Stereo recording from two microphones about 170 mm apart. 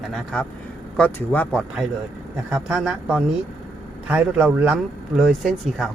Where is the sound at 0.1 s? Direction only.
5° left (ahead or behind).